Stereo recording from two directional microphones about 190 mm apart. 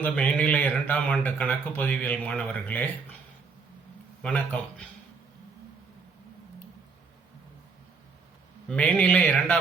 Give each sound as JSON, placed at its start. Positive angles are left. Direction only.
{"t": 0.0, "sound": "speech", "side_deg": 10}
{"t": 4.2, "sound": "speech", "side_deg": 5}
{"t": 8.6, "sound": "speech", "side_deg": 5}